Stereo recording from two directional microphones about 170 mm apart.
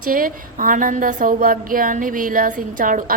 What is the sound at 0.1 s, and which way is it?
A woman's voice, 55° right (ahead or behind).